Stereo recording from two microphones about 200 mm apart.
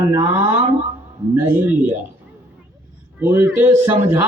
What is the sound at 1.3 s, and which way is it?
Speech, 10° right (ahead or behind).